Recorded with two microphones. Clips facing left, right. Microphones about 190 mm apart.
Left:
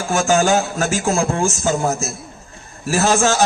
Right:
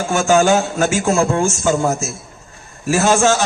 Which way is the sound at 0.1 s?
35° left (ahead or behind).